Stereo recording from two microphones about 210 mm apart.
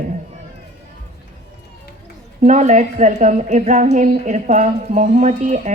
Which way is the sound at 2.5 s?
35° right (ahead or behind).